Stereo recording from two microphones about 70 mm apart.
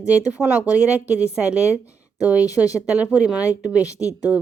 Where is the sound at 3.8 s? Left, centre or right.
Left.